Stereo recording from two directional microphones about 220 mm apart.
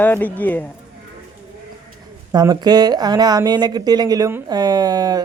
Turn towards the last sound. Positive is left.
turn(degrees=-15)  # may be behind; listen again after turning